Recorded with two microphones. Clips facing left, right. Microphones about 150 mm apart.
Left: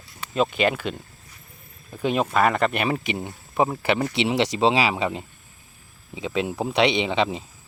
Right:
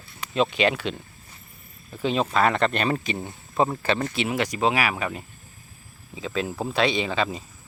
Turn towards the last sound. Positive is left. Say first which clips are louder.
# left 3 dB
turn(degrees=20)  # may be behind; listen again after turning